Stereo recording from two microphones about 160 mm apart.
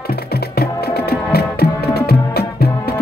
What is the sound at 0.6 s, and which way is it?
Music, 85° left.